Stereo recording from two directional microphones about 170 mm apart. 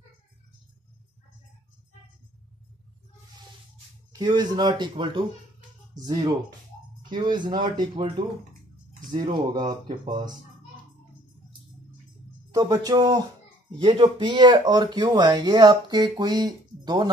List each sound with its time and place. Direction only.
4.1 s speech: 25° right (ahead or behind)
9.1 s speech: 25° right (ahead or behind)
12.5 s speech: 20° right (ahead or behind)